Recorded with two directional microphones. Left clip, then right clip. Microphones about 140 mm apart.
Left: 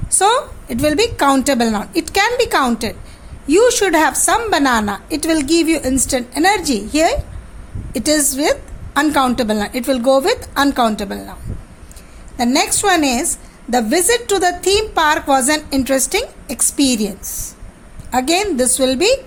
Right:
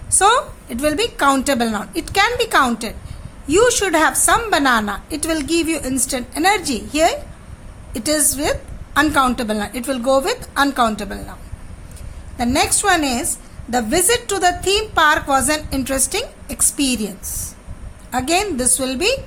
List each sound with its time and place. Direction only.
0.2 s a woman's voice: 25° left (ahead or behind)
12.4 s a woman's voice: 30° left (ahead or behind)